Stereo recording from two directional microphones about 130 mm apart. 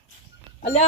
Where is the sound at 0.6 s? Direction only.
55° left (ahead or behind).